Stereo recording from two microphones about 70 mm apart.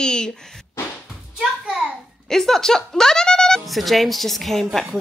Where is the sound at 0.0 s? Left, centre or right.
Centre.